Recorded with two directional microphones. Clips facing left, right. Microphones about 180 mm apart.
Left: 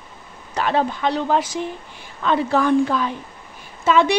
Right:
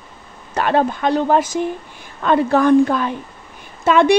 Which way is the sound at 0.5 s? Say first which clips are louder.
Right 3 dB; 55° right (ahead or behind).